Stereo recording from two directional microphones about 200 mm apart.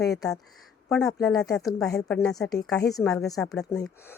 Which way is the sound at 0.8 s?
5° left (ahead or behind).